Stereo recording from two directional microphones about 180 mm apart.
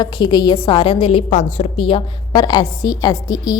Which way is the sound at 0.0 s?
25° left (ahead or behind).